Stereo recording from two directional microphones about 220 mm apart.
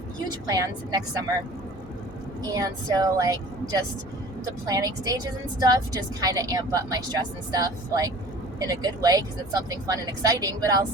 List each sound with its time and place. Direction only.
0.4 s a woman's voice: 15° right (ahead or behind)
2.5 s a woman's voice: 15° right (ahead or behind)